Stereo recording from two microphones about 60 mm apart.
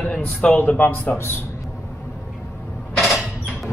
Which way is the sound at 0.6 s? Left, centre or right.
Left.